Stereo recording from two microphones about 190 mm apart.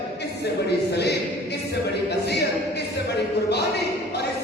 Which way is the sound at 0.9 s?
60° left (ahead or behind).